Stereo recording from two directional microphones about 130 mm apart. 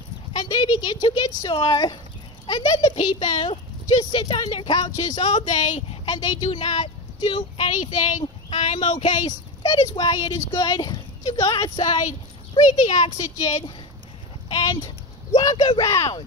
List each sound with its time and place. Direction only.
0.3 s speech: 35° left (ahead or behind)
4.7 s speech: 35° left (ahead or behind)
5.2 s speech: 65° left (ahead or behind)
5.9 s speech: 35° left (ahead or behind); by 9.3 s 65° left (ahead or behind)
9.6 s a child's voice: 30° left (ahead or behind)
12.5 s speech: 65° left (ahead or behind)
14.5 s speech: 35° left (ahead or behind)
15.8 s speech: 25° left (ahead or behind)